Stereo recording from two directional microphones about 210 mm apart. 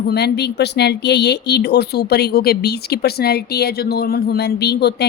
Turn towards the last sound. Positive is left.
turn(degrees=50)  # may be behind; listen again after turning